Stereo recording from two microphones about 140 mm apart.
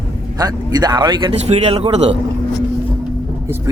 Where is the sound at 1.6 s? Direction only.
45° right (ahead or behind).